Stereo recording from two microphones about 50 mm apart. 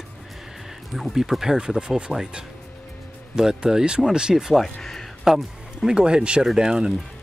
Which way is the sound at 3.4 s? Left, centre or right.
Centre.